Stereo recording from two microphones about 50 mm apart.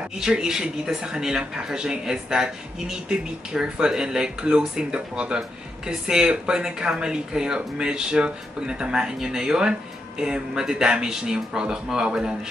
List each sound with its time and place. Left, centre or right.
0.4 s speech: centre